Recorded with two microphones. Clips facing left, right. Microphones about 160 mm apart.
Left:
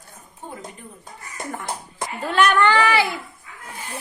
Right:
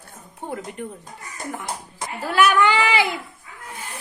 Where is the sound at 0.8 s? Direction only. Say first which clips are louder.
Right 10 dB; 65° right (ahead or behind).